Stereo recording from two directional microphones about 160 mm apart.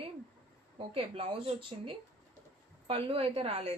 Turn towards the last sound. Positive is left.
turn(degrees=-40)  # may be behind; listen again after turning